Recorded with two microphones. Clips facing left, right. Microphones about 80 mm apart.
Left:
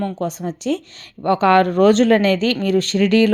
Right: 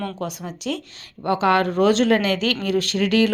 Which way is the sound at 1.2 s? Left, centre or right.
Left.